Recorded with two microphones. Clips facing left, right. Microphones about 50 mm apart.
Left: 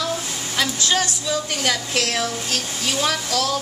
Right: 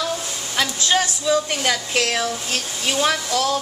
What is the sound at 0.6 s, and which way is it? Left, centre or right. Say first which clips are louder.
A woman's voice: right 1 dB; centre.